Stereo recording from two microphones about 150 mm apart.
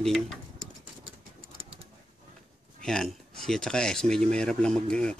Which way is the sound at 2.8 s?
5° left (ahead or behind).